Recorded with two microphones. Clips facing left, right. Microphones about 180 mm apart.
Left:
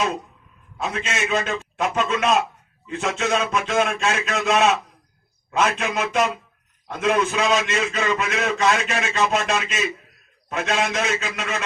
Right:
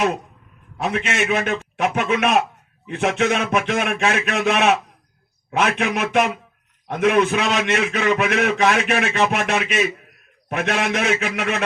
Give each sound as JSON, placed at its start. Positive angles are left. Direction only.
{"t": 0.8, "sound": "a man's voice", "side_deg": -65}